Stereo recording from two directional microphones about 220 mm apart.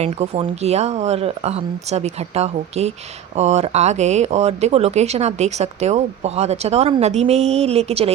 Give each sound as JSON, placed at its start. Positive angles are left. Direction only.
{"t": 0.0, "sound": "speech", "side_deg": -30}